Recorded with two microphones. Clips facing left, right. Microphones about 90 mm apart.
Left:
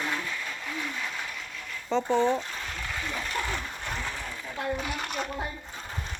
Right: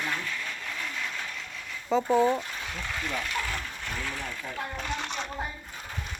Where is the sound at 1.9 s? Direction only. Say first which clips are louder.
Right 1 dB; 5° right (ahead or behind).